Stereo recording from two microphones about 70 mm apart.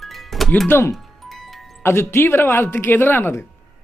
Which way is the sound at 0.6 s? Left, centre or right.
Left.